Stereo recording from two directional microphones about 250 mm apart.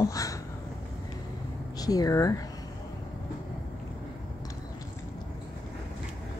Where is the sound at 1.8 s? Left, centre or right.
Centre.